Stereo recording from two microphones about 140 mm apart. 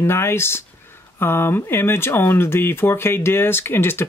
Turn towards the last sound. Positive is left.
turn(degrees=15)  # may be behind; listen again after turning